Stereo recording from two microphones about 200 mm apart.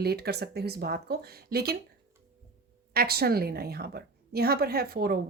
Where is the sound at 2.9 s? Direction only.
50° right (ahead or behind).